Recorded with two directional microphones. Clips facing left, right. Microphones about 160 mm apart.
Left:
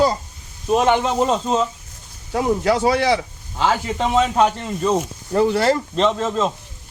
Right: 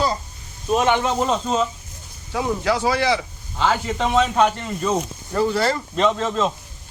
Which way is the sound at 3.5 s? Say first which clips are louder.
Left 1 dB; 5° left (ahead or behind).